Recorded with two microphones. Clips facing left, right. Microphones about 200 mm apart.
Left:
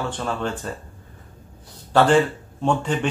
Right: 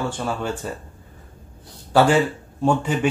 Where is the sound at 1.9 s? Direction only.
10° right (ahead or behind).